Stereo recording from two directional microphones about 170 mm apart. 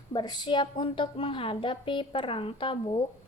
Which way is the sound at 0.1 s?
25° left (ahead or behind).